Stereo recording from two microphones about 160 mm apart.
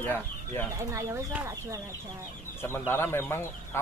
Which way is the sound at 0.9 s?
15° right (ahead or behind).